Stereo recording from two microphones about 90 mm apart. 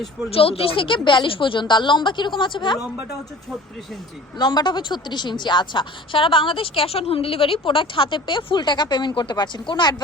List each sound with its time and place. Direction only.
0.3 s a woman's voice: 90° left; by 2.7 s 60° left (ahead or behind)
4.4 s a woman's voice: 55° left (ahead or behind)